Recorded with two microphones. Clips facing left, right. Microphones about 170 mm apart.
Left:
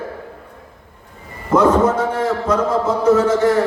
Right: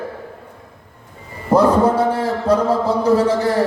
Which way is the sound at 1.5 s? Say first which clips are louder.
Even; 35° right (ahead or behind).